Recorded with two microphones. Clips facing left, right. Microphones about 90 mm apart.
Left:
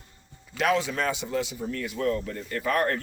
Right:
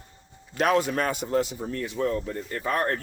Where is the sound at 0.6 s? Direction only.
45° right (ahead or behind).